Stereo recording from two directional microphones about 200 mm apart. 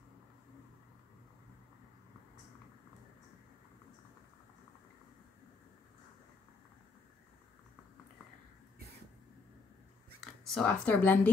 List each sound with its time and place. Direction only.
10.2 s speech: 5° left (ahead or behind)